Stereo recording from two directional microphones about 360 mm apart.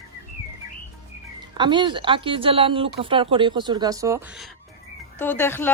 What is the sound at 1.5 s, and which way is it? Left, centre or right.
A woman's voice, centre.